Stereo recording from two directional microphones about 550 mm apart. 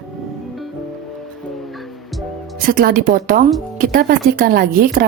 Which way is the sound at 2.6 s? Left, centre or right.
Centre.